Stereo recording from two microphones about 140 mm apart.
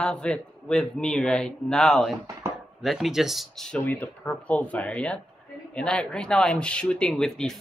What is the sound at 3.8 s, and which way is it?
Speech, 10° left (ahead or behind).